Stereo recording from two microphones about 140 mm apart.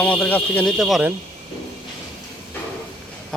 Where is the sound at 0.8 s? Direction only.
Centre (ahead or behind).